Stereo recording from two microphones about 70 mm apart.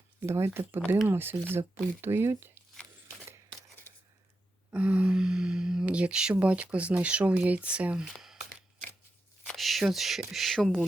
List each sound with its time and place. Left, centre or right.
0.2 s speech: right
4.7 s speech: centre
9.6 s a sound: centre
9.8 s speech: centre